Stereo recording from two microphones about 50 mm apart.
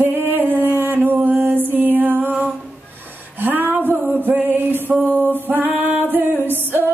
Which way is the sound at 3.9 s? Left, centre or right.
Right.